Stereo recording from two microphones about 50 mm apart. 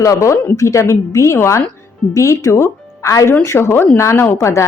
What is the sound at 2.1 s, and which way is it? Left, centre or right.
Speech, left.